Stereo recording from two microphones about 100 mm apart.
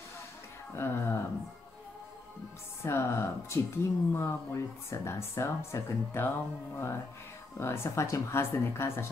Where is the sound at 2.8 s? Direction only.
25° left (ahead or behind).